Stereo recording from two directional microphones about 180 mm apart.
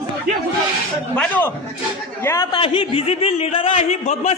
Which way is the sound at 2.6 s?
30° left (ahead or behind).